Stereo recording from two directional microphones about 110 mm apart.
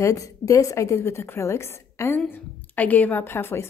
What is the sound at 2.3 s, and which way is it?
A woman's voice, 15° left (ahead or behind).